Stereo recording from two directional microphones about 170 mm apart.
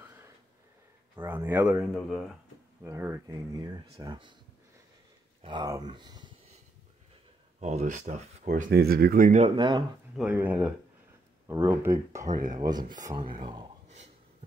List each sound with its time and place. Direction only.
1.1 s speech: 15° right (ahead or behind)
2.0 s speech: centre (ahead or behind)
2.8 s speech: 15° right (ahead or behind)
5.4 s speech: 25° right (ahead or behind)
7.6 s speech: 45° right (ahead or behind)
8.7 s speech: 65° right (ahead or behind)
9.4 s speech: 25° right (ahead or behind)
10.1 s speech: 10° right (ahead or behind); by 13.7 s 30° right (ahead or behind)